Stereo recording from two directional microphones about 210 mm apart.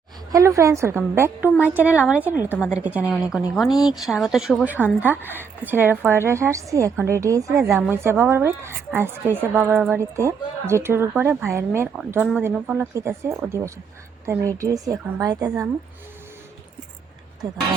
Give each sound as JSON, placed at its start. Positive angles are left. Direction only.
{"t": 0.3, "sound": "a woman's voice", "side_deg": -15}